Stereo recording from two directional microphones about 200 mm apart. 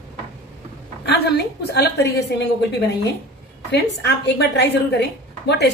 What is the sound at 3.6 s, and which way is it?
A woman's voice, 55° left (ahead or behind).